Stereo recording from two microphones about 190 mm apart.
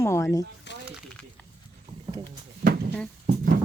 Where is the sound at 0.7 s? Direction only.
65° left (ahead or behind).